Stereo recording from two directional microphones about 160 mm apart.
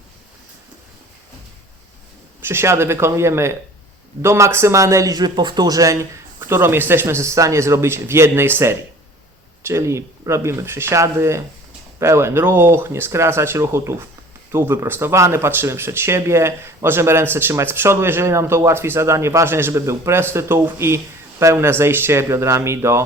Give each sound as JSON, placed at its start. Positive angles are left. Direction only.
{"t": 2.4, "sound": "speech", "side_deg": -15}